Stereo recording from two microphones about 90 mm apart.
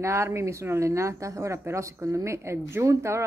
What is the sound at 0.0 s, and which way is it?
Speech, 30° right (ahead or behind).